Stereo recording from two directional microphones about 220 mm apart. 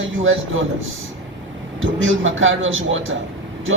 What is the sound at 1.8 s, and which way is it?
Speech, 60° right (ahead or behind).